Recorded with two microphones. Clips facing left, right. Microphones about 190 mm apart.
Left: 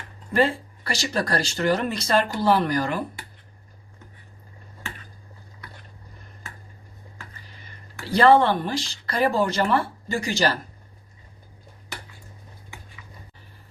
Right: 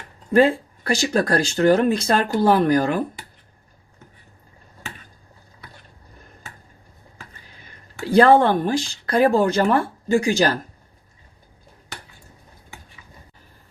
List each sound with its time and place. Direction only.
0.3 s speech: 50° right (ahead or behind)
8.0 s speech: 50° right (ahead or behind)